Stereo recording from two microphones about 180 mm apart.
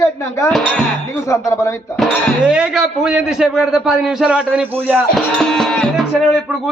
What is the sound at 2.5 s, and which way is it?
A man's voice, 5° right (ahead or behind).